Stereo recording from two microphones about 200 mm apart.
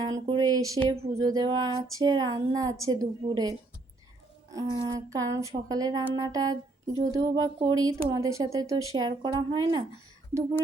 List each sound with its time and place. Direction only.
0.0 s speech: 20° right (ahead or behind)
4.5 s speech: 20° right (ahead or behind)